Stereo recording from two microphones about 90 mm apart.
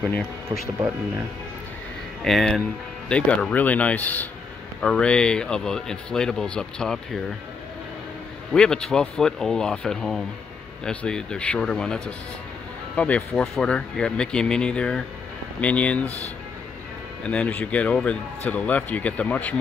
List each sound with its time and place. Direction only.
2.2 s speech: 5° left (ahead or behind)
3.1 s speech: 15° left (ahead or behind)
8.5 s speech: 10° left (ahead or behind)
17.2 s speech: 15° left (ahead or behind)